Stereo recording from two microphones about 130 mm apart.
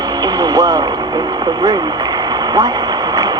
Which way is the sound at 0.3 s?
30° right (ahead or behind).